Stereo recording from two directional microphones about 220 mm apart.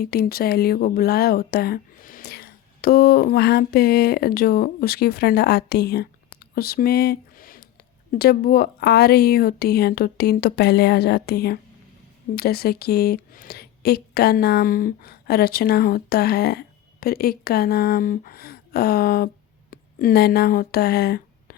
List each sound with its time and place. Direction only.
0.0 s speech: 45° left (ahead or behind)